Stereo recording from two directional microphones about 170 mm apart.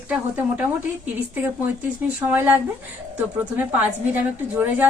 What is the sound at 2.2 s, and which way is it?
Speech, 10° right (ahead or behind).